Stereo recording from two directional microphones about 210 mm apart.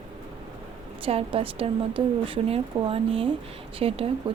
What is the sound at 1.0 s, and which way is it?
A woman's voice, 25° right (ahead or behind).